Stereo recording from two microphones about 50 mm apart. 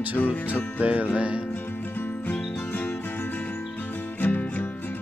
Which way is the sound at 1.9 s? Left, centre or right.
Left.